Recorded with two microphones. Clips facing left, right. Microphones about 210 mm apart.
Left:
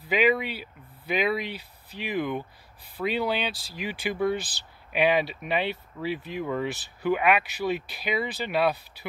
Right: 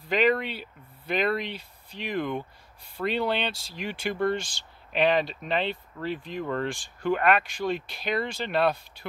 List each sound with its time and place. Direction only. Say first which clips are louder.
0.1 s speech: even; 5° left (ahead or behind)